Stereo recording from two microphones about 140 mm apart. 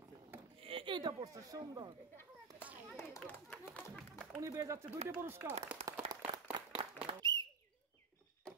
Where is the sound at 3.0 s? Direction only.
15° left (ahead or behind).